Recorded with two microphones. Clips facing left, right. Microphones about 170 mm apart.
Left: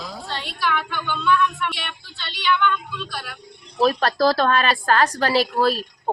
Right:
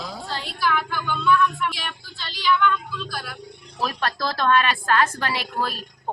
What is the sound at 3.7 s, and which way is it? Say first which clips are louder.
A woman's voice: left 8 dB; 35° left (ahead or behind).